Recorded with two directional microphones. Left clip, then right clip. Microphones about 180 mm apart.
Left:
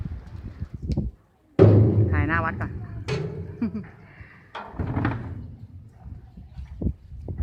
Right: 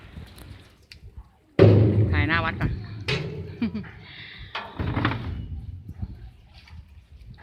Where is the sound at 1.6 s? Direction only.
60° left (ahead or behind).